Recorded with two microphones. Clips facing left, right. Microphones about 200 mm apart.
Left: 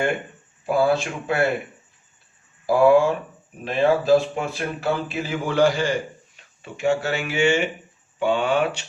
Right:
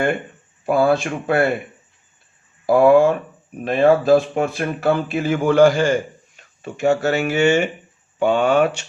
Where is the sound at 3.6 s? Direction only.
55° right (ahead or behind).